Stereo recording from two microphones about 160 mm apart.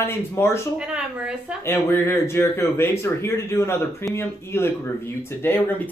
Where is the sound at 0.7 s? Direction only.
5° right (ahead or behind).